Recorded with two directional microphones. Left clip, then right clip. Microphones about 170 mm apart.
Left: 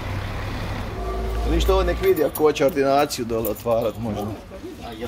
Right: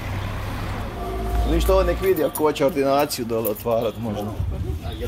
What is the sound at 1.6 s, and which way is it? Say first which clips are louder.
Speech: right 1 dB; 10° right (ahead or behind).